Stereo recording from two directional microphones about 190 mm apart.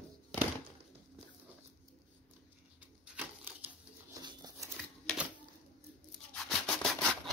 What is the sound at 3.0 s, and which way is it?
Typewriter, 10° right (ahead or behind).